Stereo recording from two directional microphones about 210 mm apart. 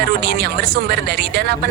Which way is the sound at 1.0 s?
50° right (ahead or behind).